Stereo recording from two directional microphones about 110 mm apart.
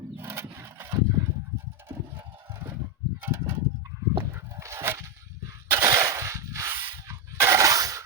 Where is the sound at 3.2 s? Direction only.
20° right (ahead or behind).